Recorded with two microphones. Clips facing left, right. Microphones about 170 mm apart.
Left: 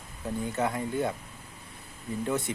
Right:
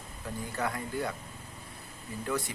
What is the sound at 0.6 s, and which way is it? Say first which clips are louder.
Speech: left 4 dB; 20° left (ahead or behind).